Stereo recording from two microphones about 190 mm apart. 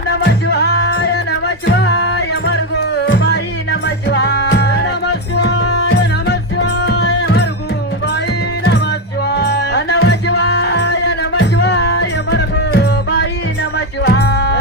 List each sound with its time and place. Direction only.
0.1 s music: 60° left (ahead or behind)
8.6 s music: 60° left (ahead or behind)